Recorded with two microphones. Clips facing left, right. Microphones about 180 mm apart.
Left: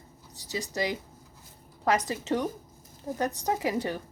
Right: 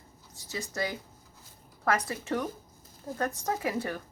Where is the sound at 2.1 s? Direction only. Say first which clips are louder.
Left 3 dB; 20° left (ahead or behind).